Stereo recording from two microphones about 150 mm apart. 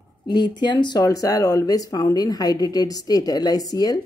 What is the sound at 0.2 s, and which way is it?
Speech, 30° left (ahead or behind).